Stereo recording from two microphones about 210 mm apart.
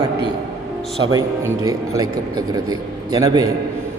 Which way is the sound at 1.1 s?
15° right (ahead or behind).